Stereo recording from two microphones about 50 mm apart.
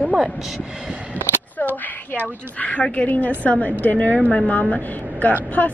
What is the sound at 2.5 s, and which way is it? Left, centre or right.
A woman's voice, left.